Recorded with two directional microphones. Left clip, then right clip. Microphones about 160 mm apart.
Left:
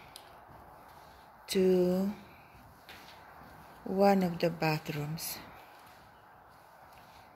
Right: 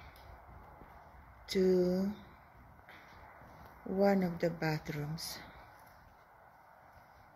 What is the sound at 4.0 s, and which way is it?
Speech, 10° left (ahead or behind).